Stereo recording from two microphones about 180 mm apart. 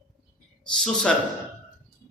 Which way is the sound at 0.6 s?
5° left (ahead or behind).